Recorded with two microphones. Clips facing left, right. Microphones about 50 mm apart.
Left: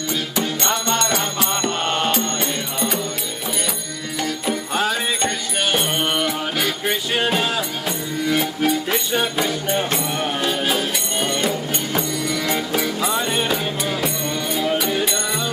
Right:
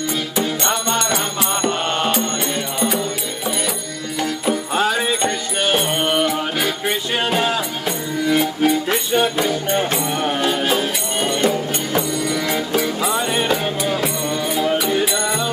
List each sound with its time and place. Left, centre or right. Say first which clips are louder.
0.4 s music: right 2 dB; right
4.2 s music: right 3 dB; centre